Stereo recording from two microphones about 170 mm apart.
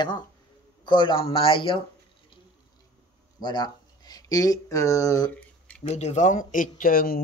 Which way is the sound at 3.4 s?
25° left (ahead or behind).